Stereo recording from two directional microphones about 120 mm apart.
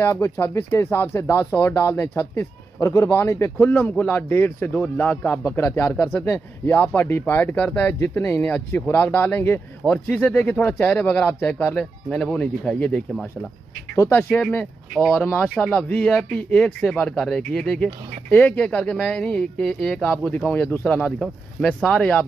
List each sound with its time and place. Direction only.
0.1 s speech: 20° left (ahead or behind)
14.5 s speech: 10° left (ahead or behind)